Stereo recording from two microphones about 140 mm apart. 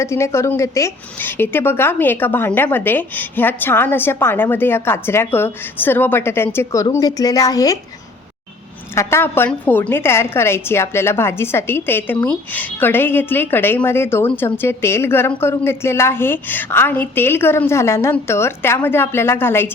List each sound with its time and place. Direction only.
0.0 s a woman's voice: 20° left (ahead or behind)
9.0 s a woman's voice: 20° left (ahead or behind)